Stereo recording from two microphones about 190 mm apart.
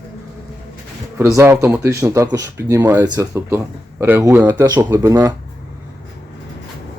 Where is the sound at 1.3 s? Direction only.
15° right (ahead or behind).